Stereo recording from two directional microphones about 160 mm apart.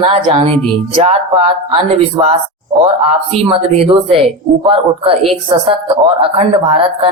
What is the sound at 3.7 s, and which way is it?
A woman's voice, 40° right (ahead or behind).